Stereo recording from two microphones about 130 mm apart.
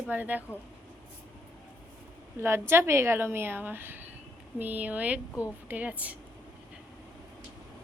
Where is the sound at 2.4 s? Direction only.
20° right (ahead or behind).